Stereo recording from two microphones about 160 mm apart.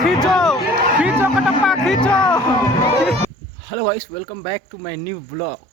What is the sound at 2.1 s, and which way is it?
Speech, 5° left (ahead or behind).